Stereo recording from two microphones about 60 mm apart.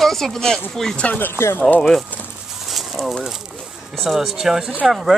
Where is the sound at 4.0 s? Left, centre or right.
Centre.